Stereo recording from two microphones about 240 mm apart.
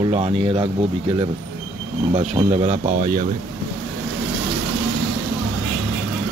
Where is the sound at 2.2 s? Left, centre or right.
Right.